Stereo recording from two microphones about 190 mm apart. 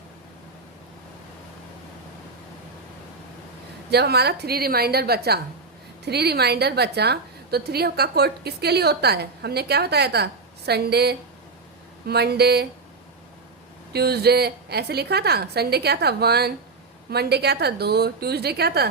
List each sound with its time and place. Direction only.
3.9 s a woman's voice: 55° right (ahead or behind)
13.9 s a woman's voice: 55° right (ahead or behind)